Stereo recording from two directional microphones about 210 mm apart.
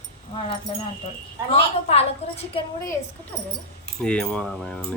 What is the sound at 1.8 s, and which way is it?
Speech, 30° left (ahead or behind).